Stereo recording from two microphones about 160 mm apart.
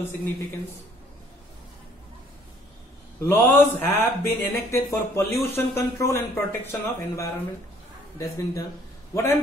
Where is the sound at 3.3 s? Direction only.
10° left (ahead or behind).